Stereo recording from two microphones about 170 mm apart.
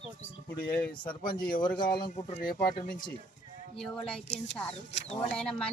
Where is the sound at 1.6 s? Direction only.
25° left (ahead or behind).